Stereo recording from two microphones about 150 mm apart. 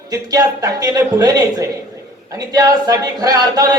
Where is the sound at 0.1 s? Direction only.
25° right (ahead or behind).